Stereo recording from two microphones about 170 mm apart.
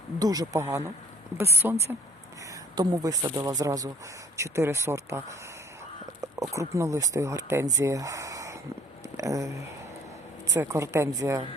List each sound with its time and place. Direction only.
0.2 s a woman's voice: 20° right (ahead or behind)
2.7 s a woman's voice: 20° right (ahead or behind)
6.5 s speech: 20° right (ahead or behind)
10.5 s a woman's voice: 15° right (ahead or behind)